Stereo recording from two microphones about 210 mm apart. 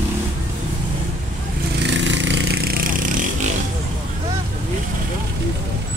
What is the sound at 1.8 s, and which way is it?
Vehicle, 60° right (ahead or behind).